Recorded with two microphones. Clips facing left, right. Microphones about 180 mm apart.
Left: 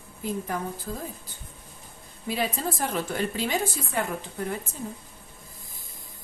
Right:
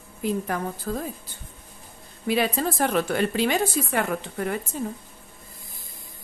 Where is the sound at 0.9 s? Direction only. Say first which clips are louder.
Right 6 dB; 75° right (ahead or behind).